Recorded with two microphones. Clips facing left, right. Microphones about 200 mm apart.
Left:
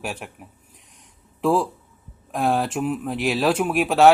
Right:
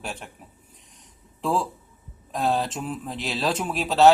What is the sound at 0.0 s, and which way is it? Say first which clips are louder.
Speech: left 4 dB; 10° left (ahead or behind).